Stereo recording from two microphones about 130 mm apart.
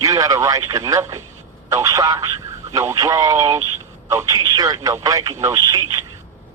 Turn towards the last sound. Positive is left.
turn(degrees=-30)  # may be behind; listen again after turning